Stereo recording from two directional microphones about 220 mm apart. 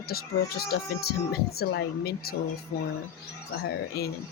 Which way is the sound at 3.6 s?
45° left (ahead or behind).